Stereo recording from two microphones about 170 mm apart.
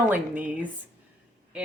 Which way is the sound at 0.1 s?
10° right (ahead or behind).